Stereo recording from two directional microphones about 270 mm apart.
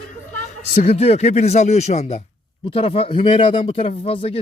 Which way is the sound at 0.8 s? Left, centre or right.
Left.